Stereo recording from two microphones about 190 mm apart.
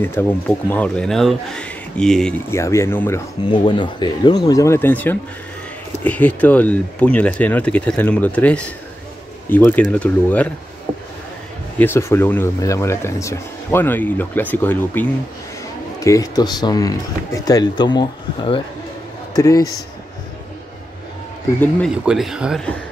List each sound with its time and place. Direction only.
0.2 s speech: 10° left (ahead or behind)
2.5 s speech: 15° left (ahead or behind)
3.4 s speech: 25° left (ahead or behind); by 10.5 s 10° left (ahead or behind)
11.8 s speech: 15° left (ahead or behind)
21.9 s speech: 5° right (ahead or behind)